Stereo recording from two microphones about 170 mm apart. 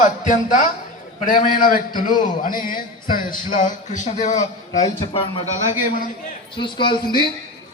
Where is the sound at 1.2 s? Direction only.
50° left (ahead or behind).